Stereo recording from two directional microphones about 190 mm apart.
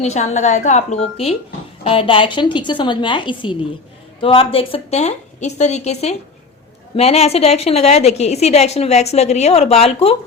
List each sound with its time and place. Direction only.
0.0 s a woman's voice: 35° left (ahead or behind)